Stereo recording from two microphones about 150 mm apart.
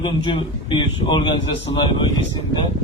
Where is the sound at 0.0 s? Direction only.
35° left (ahead or behind).